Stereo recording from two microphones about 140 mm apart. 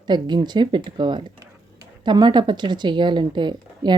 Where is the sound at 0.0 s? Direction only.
30° right (ahead or behind).